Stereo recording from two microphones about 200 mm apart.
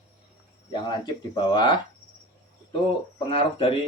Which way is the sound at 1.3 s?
20° left (ahead or behind).